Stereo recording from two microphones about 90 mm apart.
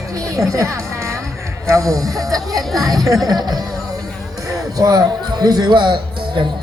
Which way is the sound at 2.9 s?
40° right (ahead or behind).